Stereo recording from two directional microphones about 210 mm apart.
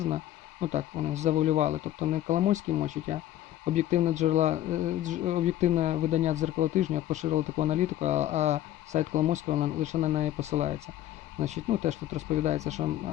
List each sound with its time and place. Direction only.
0.6 s speech: 30° right (ahead or behind)